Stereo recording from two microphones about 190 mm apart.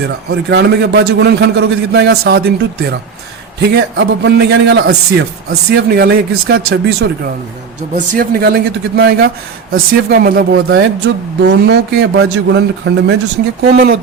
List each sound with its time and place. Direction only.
0.3 s speech: 60° right (ahead or behind)
6.6 s speech: 90° right
7.8 s speech: 45° right (ahead or behind); by 13.1 s 65° right (ahead or behind)
13.7 s speech: 55° right (ahead or behind)